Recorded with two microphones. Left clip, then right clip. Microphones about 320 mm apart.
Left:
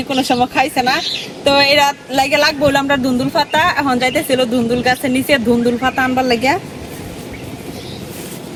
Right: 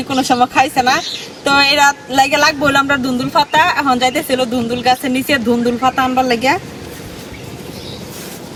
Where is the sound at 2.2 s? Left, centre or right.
Centre.